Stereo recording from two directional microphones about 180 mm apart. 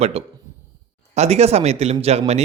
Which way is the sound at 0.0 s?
35° right (ahead or behind).